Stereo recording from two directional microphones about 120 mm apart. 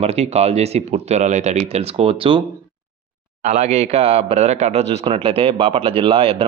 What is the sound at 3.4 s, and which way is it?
Speech, 70° right (ahead or behind).